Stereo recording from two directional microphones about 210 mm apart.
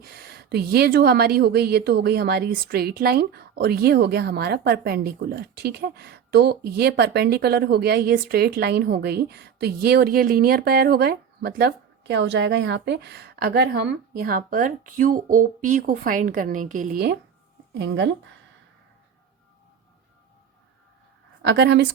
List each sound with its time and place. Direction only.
0.0 s a woman's voice: 50° right (ahead or behind)
17.7 s a woman's voice: 55° right (ahead or behind)
21.4 s a woman's voice: 55° right (ahead or behind)